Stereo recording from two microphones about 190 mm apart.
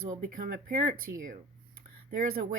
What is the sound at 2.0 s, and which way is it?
Speech, 50° right (ahead or behind).